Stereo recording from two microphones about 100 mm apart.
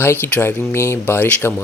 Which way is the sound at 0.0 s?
20° left (ahead or behind).